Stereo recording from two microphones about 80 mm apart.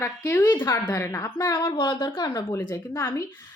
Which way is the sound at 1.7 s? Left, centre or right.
Left.